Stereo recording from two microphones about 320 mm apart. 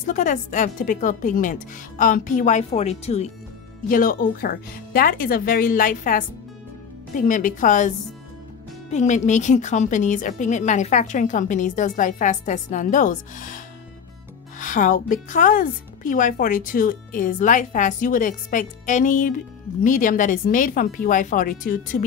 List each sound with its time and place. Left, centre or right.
0.0 s a woman's voice: left
8.9 s a woman's voice: left
14.6 s a woman's voice: left